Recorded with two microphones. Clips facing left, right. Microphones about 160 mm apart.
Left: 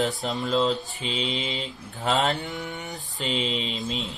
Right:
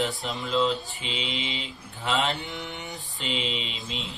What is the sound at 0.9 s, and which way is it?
Mantra, 40° left (ahead or behind).